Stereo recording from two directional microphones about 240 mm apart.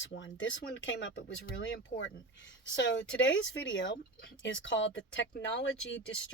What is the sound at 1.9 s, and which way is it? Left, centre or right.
Speech, left.